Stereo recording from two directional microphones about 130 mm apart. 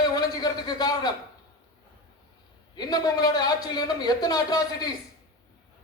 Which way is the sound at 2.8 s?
30° left (ahead or behind).